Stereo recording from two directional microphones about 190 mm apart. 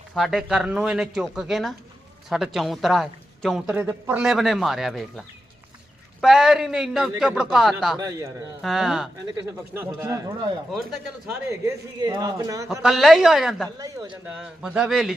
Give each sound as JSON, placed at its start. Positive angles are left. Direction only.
{"t": 0.1, "sound": "speech", "side_deg": 0}
{"t": 3.7, "sound": "speech", "side_deg": -10}
{"t": 6.2, "sound": "speech", "side_deg": 0}
{"t": 7.9, "sound": "a man's voice", "side_deg": -15}
{"t": 8.6, "sound": "speech", "side_deg": 0}
{"t": 9.6, "sound": "a man's voice", "side_deg": -15}
{"t": 11.6, "sound": "a man's voice", "side_deg": -20}
{"t": 12.8, "sound": "speech", "side_deg": 0}
{"t": 13.7, "sound": "speech", "side_deg": -20}
{"t": 14.3, "sound": "speech", "side_deg": -5}